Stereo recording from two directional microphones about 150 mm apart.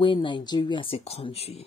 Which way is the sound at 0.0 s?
35° left (ahead or behind).